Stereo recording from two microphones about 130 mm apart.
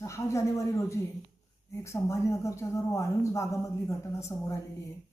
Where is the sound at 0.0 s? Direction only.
25° left (ahead or behind).